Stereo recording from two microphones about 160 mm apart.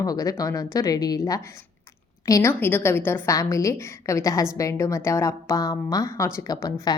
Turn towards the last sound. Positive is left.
turn(degrees=20)  # may be behind; listen again after turning